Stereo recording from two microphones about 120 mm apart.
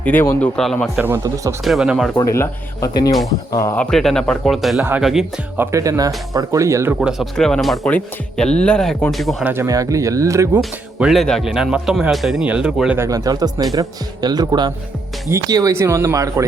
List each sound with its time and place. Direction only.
0.0 s speech: 15° left (ahead or behind)
0.9 s speech: 15° right (ahead or behind)
1.6 s speech: 5° right (ahead or behind)
2.1 s speech: 25° left (ahead or behind)
3.8 s speech: 5° left (ahead or behind)
4.8 s speech: 15° right (ahead or behind)
7.0 s speech: 5° right (ahead or behind)
9.4 s speech: 15° right (ahead or behind)
9.6 s speech: 30° right (ahead or behind)
10.6 s speech: centre (ahead or behind)
13.0 s speech: 30° right (ahead or behind)